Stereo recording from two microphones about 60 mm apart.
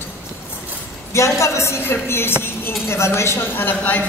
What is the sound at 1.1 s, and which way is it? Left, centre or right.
A woman's voice, left.